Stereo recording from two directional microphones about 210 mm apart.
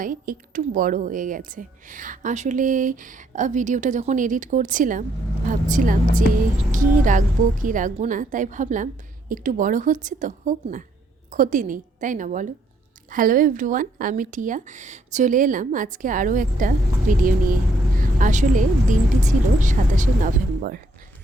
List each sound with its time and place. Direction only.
0.0 s a woman's voice: 40° right (ahead or behind)